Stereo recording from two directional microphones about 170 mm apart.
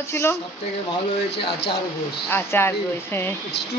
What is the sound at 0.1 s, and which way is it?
Speech, 15° left (ahead or behind).